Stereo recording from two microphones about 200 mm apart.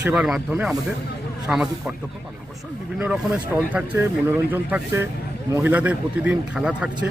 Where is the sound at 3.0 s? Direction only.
5° right (ahead or behind).